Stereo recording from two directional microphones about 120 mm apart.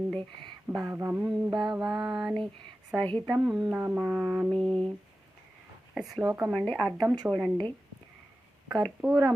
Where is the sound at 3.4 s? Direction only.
10° right (ahead or behind).